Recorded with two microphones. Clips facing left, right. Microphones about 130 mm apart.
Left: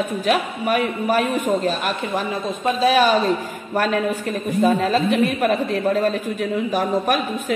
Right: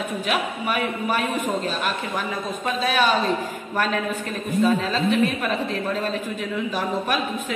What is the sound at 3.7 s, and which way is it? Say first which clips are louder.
A woman's voice: left 4 dB; 40° left (ahead or behind).